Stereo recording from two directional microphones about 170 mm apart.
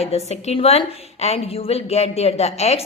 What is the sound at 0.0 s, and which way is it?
A woman's voice, 40° left (ahead or behind).